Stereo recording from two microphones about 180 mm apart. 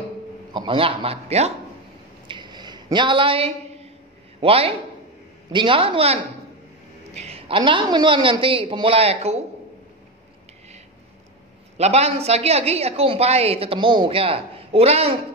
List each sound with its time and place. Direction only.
0.5 s speech: 25° right (ahead or behind)
2.2 s a sound: 25° right (ahead or behind)
4.4 s a woman's voice: 30° right (ahead or behind)
7.2 s a woman's voice: 35° right (ahead or behind)
11.7 s a woman's voice: 35° right (ahead or behind)